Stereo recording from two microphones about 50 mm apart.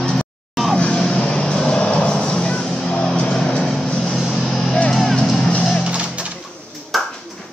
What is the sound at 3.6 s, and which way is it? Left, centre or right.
Music, centre.